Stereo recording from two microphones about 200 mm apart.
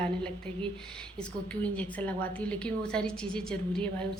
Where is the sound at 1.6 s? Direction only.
5° left (ahead or behind).